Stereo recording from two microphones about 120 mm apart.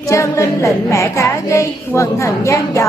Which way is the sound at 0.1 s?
25° left (ahead or behind).